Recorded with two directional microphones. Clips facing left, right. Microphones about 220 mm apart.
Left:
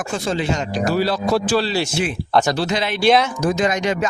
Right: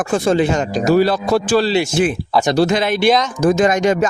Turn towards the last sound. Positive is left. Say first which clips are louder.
# right 5 dB
turn(degrees=-50)  # may be behind; listen again after turning